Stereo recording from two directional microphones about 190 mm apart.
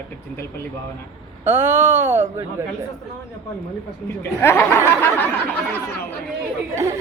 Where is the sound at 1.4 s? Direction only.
10° right (ahead or behind).